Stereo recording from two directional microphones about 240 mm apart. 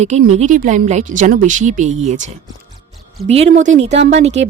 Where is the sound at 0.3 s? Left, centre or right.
Right.